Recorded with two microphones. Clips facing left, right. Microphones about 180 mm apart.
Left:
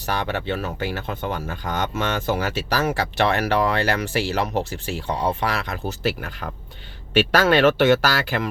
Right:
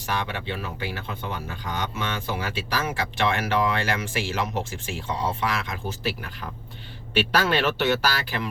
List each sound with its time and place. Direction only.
0.0 s speech: 40° left (ahead or behind)
7.2 s speech: 50° left (ahead or behind)